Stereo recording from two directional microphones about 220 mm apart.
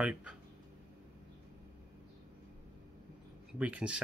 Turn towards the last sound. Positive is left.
turn(degrees=-5)  # may be behind; listen again after turning